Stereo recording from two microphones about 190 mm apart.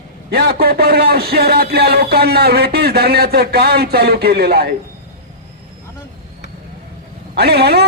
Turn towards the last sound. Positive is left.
turn(degrees=-60)  # may be behind; listen again after turning